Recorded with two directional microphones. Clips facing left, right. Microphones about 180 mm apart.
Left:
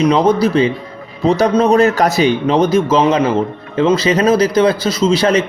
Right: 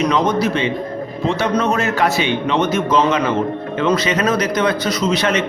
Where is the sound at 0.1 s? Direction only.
35° left (ahead or behind).